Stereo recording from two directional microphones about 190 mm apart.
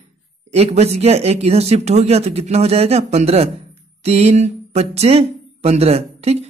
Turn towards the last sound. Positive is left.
turn(degrees=-35)  # may be behind; listen again after turning